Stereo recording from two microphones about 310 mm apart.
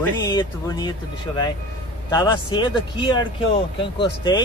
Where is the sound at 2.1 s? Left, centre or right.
Centre.